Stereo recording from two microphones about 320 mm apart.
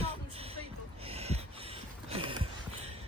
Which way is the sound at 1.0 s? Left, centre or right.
Centre.